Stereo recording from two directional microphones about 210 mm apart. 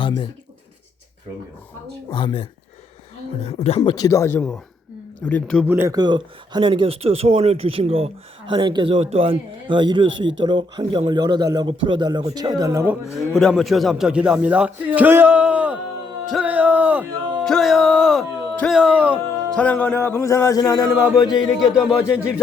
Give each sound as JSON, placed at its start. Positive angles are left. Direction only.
{"t": 2.0, "sound": "a woman's voice", "side_deg": 20}
{"t": 3.8, "sound": "speech", "side_deg": 20}
{"t": 5.6, "sound": "speech", "side_deg": -10}
{"t": 13.1, "sound": "speech", "side_deg": 0}
{"t": 16.3, "sound": "music", "side_deg": -5}
{"t": 17.5, "sound": "speech", "side_deg": 0}
{"t": 19.5, "sound": "speech", "side_deg": 5}